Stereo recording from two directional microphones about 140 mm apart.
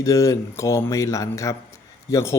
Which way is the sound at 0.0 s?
25° left (ahead or behind).